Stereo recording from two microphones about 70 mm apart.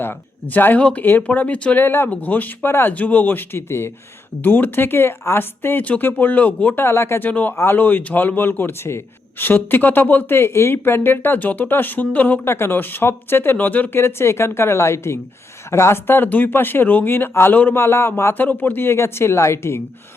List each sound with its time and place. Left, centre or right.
0.0 s speech: left
1.8 s speech: left
7.3 s speech: left
7.5 s speech: left
7.8 s speech: left
14.0 s speech: left